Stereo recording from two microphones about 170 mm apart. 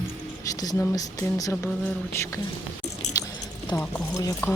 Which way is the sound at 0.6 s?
20° left (ahead or behind).